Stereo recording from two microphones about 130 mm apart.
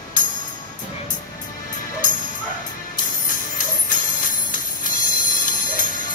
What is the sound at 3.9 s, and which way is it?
Music, 90° left.